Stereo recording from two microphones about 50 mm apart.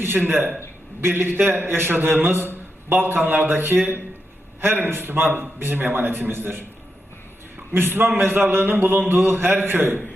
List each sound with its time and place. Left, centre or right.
0.0 s a man's voice: right
7.7 s a man's voice: right